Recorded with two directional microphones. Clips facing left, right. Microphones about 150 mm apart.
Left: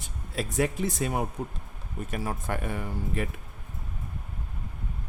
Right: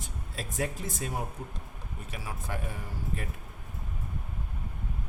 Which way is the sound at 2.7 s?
70° left (ahead or behind).